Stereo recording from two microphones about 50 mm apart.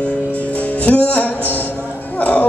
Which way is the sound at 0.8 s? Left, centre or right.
Left.